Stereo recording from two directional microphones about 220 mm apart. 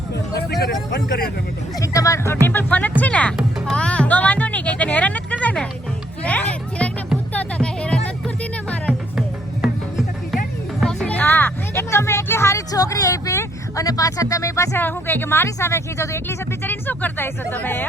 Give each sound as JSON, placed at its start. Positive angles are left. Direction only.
{"t": 0.6, "sound": "speech", "side_deg": 50}
{"t": 1.8, "sound": "speech", "side_deg": 15}
{"t": 3.0, "sound": "music", "side_deg": 5}
{"t": 10.3, "sound": "speech", "side_deg": 0}